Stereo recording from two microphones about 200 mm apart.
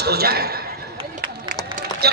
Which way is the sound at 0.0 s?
50° right (ahead or behind).